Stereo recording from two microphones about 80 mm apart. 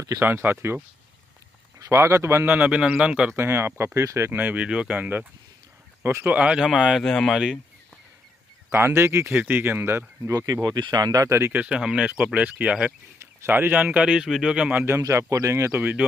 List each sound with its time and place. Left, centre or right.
0.2 s speech: right
1.8 s speech: right
2.4 s speech: centre
3.3 s speech: right
4.3 s speech: right
6.3 s speech: centre
8.7 s speech: right
10.4 s speech: right
11.5 s speech: centre
15.0 s speech: right
15.7 s speech: centre